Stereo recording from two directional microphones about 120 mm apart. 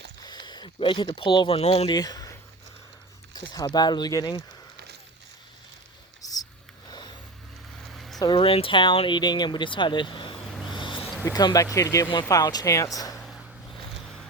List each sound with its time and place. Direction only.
0.2 s speech: 35° left (ahead or behind); by 1.9 s 60° left (ahead or behind)
1.9 s speech: 30° left (ahead or behind)
6.2 s a sound: 30° left (ahead or behind)
6.8 s vehicle: 35° left (ahead or behind)
7.9 s vehicle: centre (ahead or behind)
8.2 s speech: 45° left (ahead or behind)
10.3 s vehicle: 5° left (ahead or behind)
10.7 s a sound: 45° left (ahead or behind)
11.3 s speech: 30° left (ahead or behind)
13.1 s a sound: centre (ahead or behind)